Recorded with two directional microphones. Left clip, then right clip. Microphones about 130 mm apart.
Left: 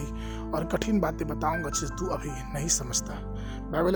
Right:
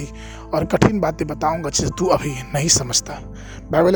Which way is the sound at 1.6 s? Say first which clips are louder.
Right 12 dB; 55° right (ahead or behind).